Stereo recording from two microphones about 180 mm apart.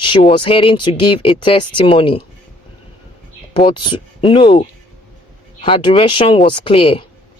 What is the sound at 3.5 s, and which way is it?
Speech, 30° left (ahead or behind).